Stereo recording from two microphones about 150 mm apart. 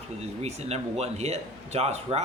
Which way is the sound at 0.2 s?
45° right (ahead or behind).